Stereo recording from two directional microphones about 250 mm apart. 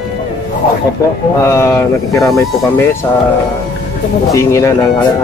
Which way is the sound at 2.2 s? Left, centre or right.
Centre.